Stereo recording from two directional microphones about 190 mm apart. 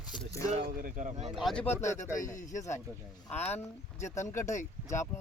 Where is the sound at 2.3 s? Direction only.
40° left (ahead or behind).